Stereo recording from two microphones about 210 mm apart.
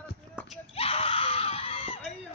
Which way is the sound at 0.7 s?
30° left (ahead or behind).